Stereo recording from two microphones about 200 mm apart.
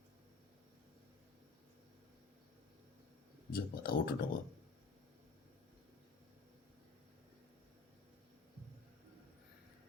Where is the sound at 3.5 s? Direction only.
50° left (ahead or behind).